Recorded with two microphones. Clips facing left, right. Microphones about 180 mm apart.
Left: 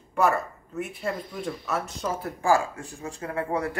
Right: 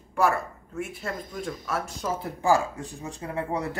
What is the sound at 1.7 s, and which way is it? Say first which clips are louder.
Speech: even; 10° right (ahead or behind).